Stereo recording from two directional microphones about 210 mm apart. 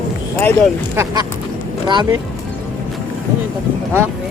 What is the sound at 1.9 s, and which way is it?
Speech, 20° right (ahead or behind).